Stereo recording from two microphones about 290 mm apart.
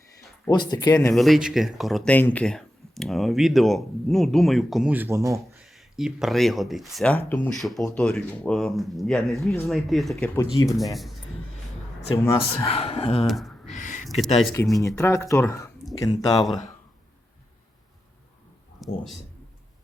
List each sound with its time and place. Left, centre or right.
0.5 s speech: centre
1.1 s speech: centre
10.9 s speech: centre
12.1 s speech: centre
13.2 s gasp: centre
13.7 s a sound: left
14.5 s speech: centre
16.4 s speech: centre
18.8 s a sound: centre